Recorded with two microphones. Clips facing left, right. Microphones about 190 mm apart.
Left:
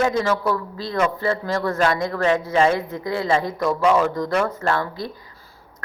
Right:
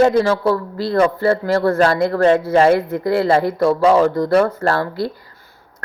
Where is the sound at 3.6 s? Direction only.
30° right (ahead or behind).